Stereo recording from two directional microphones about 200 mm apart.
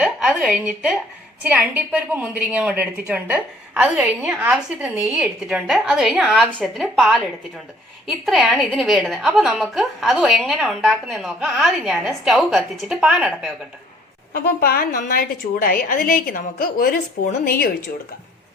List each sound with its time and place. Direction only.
0.0 s a sound: 5° right (ahead or behind)
1.4 s a woman's voice: 10° right (ahead or behind)
14.3 s a woman's voice: 50° left (ahead or behind)